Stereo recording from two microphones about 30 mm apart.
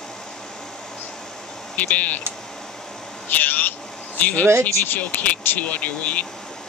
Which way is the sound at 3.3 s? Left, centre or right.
Left.